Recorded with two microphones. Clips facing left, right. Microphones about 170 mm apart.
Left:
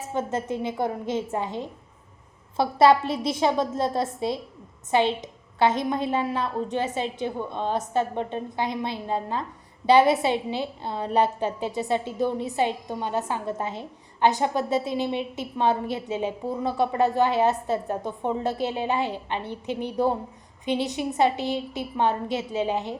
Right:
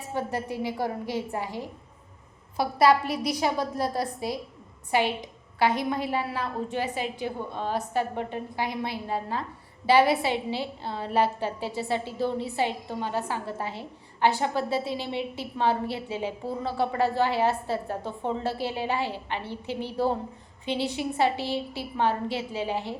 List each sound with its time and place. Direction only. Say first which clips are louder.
0.1 s a woman's voice: left 3 dB; 20° left (ahead or behind)